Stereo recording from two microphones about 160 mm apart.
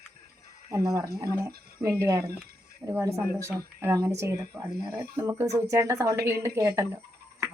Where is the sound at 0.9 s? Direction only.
20° right (ahead or behind).